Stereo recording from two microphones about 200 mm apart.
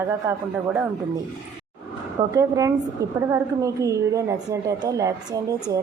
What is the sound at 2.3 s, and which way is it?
A woman's voice, 15° right (ahead or behind).